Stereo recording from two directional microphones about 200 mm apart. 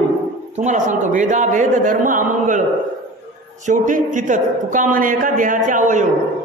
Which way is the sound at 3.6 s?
40° right (ahead or behind).